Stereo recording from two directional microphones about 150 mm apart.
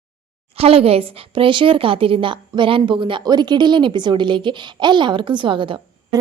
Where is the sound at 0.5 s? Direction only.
40° right (ahead or behind).